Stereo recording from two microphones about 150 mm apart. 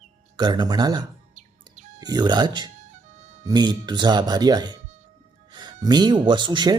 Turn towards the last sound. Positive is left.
turn(degrees=-30)  # may be behind; listen again after turning